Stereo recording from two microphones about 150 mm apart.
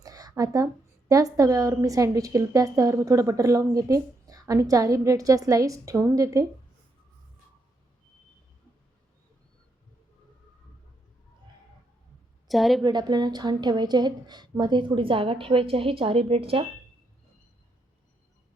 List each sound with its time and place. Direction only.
0.0 s a woman's voice: 25° right (ahead or behind)
12.5 s a woman's voice: centre (ahead or behind)
12.8 s a woman's voice: 30° right (ahead or behind)